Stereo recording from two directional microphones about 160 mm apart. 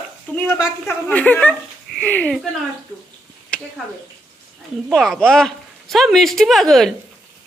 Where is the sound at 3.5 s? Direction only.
5° left (ahead or behind).